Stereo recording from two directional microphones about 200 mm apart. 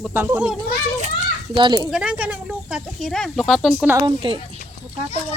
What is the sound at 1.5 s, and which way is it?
Speech, 25° right (ahead or behind).